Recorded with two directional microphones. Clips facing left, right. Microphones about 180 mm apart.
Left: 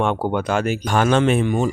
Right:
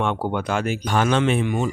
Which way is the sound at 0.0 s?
40° left (ahead or behind).